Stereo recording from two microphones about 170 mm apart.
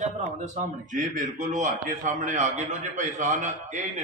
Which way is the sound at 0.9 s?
50° right (ahead or behind).